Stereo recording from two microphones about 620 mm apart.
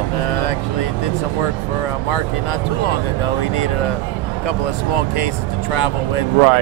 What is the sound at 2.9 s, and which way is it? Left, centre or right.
Speech, left.